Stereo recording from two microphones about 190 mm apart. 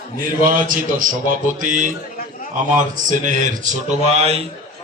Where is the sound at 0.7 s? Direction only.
45° right (ahead or behind).